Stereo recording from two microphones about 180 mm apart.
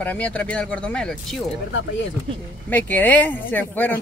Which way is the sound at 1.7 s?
90° left.